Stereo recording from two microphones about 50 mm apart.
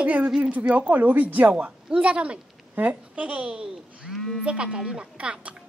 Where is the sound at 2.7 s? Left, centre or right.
Right.